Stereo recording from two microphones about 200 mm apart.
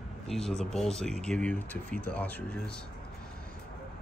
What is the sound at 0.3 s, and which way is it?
Speech, centre (ahead or behind).